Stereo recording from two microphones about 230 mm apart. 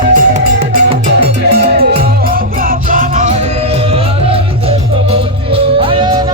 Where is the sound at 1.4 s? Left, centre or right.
Right.